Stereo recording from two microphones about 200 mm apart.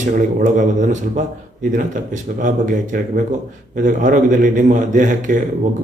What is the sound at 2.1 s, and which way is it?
A man's voice, 40° right (ahead or behind).